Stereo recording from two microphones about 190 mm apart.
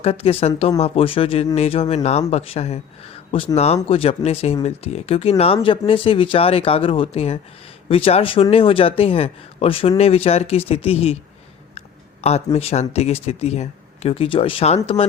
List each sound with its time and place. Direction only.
0.0 s speech: 30° left (ahead or behind)
12.2 s speech: 35° left (ahead or behind)